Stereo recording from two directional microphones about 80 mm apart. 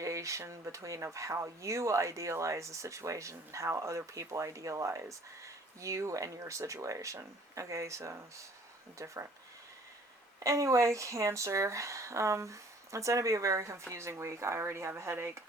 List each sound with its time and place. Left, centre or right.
0.0 s speech: right
10.4 s speech: right